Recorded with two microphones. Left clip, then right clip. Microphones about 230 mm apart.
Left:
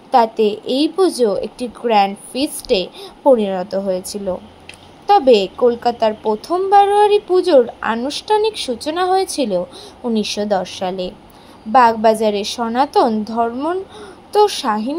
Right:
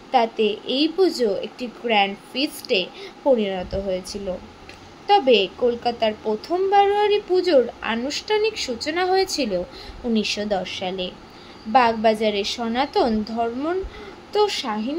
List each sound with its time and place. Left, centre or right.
0.1 s a woman's voice: centre